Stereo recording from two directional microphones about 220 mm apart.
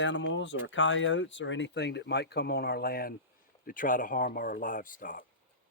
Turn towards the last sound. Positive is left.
turn(degrees=40)  # may be behind; listen again after turning